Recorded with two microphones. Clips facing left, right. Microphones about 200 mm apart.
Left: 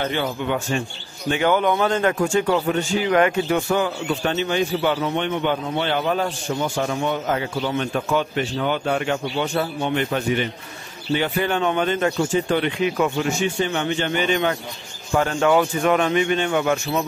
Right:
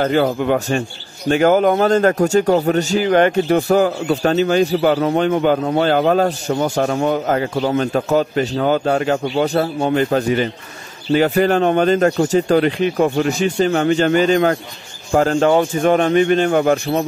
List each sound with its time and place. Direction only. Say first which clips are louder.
0.0 s a man's voice: right 8 dB; 40° right (ahead or behind)